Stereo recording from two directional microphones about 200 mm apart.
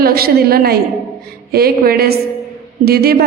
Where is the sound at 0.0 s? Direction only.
50° right (ahead or behind).